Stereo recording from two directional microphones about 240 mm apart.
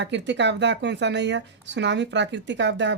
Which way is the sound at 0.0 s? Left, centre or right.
Right.